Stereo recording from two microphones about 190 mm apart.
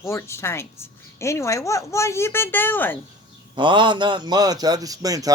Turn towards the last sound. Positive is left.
turn(degrees=-20)  # may be behind; listen again after turning